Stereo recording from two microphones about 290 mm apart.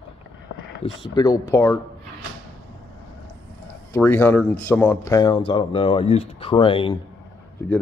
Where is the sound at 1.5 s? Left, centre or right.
Centre.